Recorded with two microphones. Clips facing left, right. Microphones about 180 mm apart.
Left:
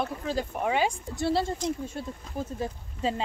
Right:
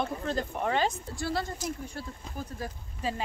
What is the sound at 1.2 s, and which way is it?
Speech, 25° left (ahead or behind).